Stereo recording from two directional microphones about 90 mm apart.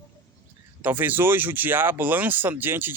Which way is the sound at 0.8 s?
20° right (ahead or behind).